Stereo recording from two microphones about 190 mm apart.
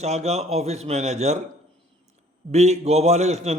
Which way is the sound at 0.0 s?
35° right (ahead or behind).